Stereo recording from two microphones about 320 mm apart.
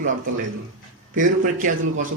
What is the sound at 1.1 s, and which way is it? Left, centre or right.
Speech, right.